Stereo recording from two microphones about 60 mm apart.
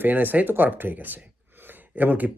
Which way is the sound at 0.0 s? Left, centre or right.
Right.